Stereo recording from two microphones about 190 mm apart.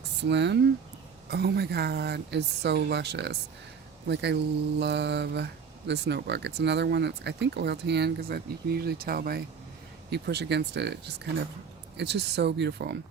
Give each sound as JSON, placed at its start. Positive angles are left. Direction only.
{"t": 0.2, "sound": "speech", "side_deg": -65}